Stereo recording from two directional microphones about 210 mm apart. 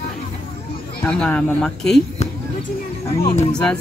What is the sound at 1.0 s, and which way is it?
Speech, 5° left (ahead or behind).